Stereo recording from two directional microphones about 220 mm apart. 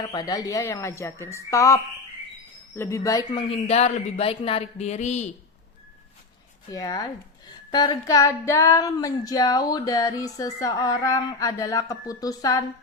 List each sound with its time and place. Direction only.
0.0 s a woman's voice: 20° left (ahead or behind)
3.5 s speech: 30° left (ahead or behind)
6.7 s a woman's voice: 15° left (ahead or behind)